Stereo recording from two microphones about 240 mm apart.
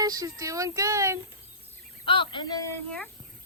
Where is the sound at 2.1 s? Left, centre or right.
Left.